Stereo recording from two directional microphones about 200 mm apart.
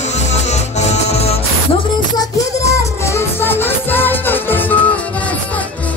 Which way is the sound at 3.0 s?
10° left (ahead or behind).